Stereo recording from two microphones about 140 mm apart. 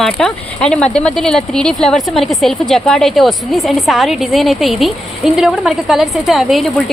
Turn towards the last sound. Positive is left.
turn(degrees=0)  # may be behind; listen again after turning